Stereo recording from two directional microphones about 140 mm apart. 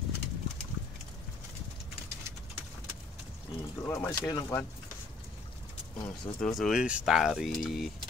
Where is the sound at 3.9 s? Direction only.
15° left (ahead or behind).